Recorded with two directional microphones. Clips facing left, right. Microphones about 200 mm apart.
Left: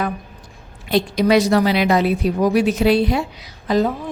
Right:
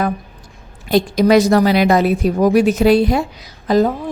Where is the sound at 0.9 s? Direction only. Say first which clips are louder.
Right 3 dB; 45° right (ahead or behind).